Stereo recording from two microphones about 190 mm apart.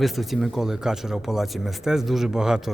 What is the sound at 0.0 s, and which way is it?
Speech, centre (ahead or behind).